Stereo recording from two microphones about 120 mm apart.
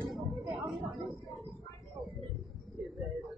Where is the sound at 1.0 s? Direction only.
25° right (ahead or behind).